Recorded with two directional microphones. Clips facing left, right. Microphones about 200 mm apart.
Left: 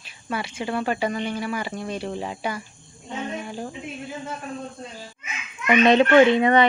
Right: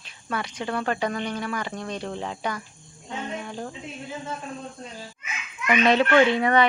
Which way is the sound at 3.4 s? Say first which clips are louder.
Left 2 dB; 10° left (ahead or behind).